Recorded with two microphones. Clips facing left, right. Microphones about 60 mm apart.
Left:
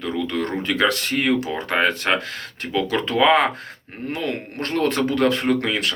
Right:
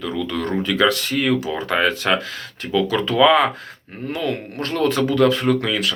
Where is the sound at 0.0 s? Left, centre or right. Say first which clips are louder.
Even; left.